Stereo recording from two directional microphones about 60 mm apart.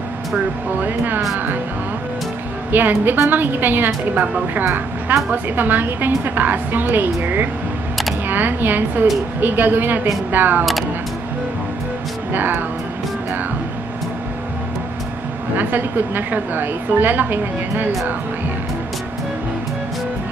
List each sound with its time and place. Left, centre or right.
0.7 s a woman's voice: right
2.7 s a woman's voice: right
10.6 s speech: centre
12.3 s music: right
15.5 s a woman's voice: right